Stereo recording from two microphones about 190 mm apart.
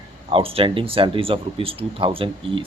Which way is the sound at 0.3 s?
30° right (ahead or behind).